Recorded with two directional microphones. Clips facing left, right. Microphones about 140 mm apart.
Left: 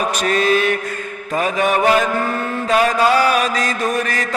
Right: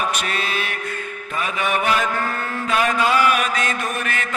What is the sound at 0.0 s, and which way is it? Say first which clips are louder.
Mantra: left 7 dB; 40° left (ahead or behind).